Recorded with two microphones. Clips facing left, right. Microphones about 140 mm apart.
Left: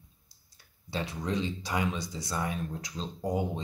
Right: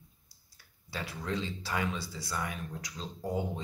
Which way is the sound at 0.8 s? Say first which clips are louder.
Left 4 dB; 20° left (ahead or behind).